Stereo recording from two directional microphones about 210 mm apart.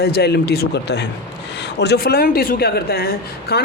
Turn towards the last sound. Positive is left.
turn(degrees=50)  # may be behind; listen again after turning